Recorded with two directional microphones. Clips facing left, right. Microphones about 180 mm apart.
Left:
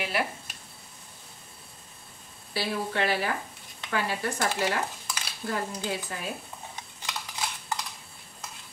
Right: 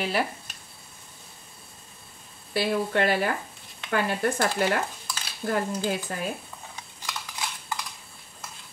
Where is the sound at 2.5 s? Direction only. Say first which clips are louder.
Right 5 dB; 55° right (ahead or behind).